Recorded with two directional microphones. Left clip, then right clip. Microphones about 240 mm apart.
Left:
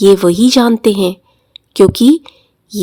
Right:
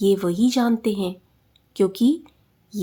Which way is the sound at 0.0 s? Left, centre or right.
Left.